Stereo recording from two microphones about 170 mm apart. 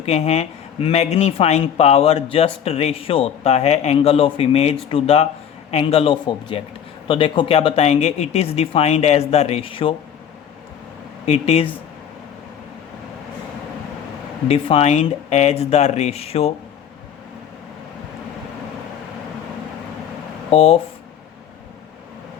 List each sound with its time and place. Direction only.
0.0 s speech: 40° left (ahead or behind)
11.3 s speech: 35° left (ahead or behind)
14.4 s speech: 35° left (ahead or behind)
20.5 s speech: 35° left (ahead or behind)